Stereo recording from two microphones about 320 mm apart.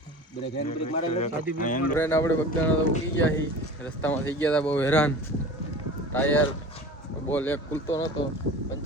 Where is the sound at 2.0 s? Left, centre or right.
Centre.